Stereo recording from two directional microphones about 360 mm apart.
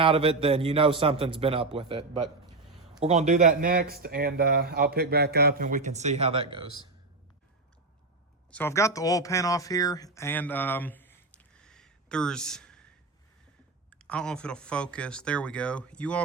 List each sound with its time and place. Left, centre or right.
0.0 s a man's voice: centre
8.4 s speech: centre
13.9 s speech: centre